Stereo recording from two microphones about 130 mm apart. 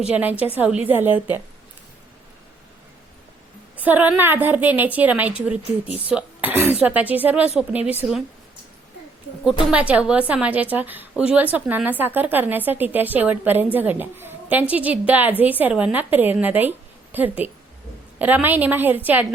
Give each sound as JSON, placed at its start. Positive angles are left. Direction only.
{"t": 0.2, "sound": "a woman's voice", "side_deg": -15}
{"t": 3.8, "sound": "a woman's voice", "side_deg": -15}
{"t": 9.4, "sound": "a woman's voice", "side_deg": -5}